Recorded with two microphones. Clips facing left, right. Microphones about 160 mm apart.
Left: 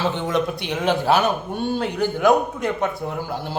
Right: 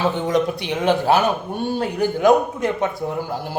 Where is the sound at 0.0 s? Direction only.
15° right (ahead or behind).